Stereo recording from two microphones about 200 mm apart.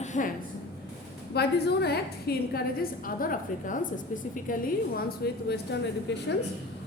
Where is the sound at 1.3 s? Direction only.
55° left (ahead or behind).